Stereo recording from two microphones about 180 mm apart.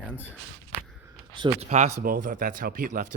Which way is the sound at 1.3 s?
25° right (ahead or behind).